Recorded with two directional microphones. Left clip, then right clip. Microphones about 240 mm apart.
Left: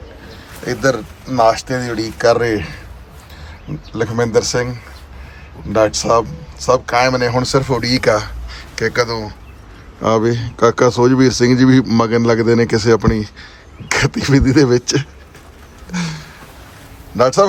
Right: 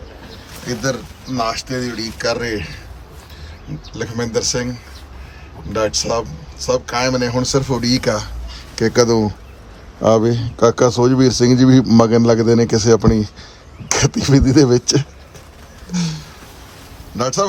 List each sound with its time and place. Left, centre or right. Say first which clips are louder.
0.6 s speech: left 6 dB; centre
3.9 s speech: left 6 dB; centre; by 9.3 s right
10.0 s speech: right 1 dB; centre
15.9 s a sound: left 1 dB; centre
17.2 s speech: left 7 dB; centre